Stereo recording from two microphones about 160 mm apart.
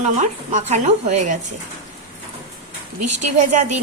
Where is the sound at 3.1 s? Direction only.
45° right (ahead or behind).